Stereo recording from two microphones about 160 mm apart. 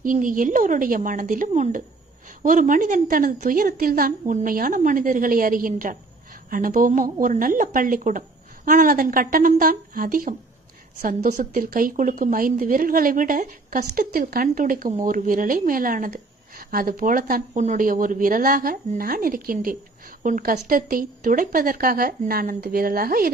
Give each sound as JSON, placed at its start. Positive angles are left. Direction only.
{"t": 0.0, "sound": "a woman's voice", "side_deg": -55}